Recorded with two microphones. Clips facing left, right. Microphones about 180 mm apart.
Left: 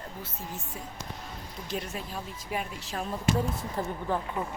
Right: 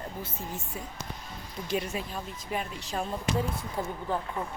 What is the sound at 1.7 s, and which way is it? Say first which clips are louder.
A woman's voice: right 3 dB; centre (ahead or behind).